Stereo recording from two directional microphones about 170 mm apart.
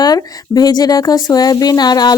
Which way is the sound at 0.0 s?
20° left (ahead or behind).